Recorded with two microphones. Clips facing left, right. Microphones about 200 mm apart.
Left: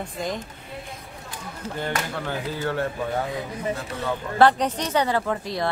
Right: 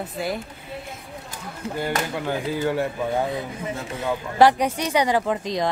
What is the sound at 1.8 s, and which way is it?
A woman's voice, 15° right (ahead or behind).